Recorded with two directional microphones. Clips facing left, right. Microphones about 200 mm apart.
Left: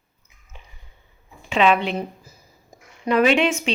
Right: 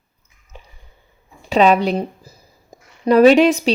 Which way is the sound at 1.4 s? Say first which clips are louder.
Right 5 dB; 40° right (ahead or behind).